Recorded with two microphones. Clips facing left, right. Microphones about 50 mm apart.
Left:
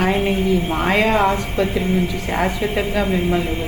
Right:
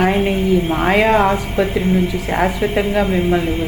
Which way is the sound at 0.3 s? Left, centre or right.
Centre.